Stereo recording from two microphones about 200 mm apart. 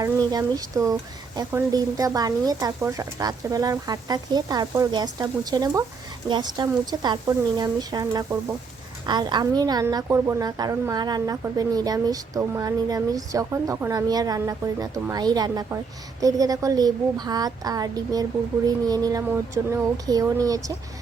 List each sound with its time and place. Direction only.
0.0 s a woman's voice: 20° right (ahead or behind)